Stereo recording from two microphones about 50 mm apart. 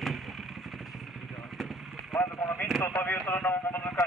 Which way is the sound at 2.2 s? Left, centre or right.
Left.